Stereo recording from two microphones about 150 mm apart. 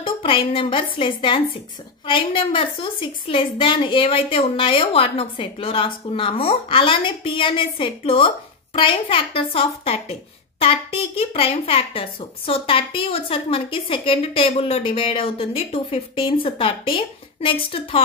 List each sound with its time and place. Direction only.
0.0 s a woman's voice: 35° left (ahead or behind)